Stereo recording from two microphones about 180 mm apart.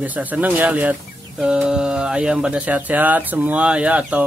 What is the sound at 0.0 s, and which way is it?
Speech, 10° right (ahead or behind).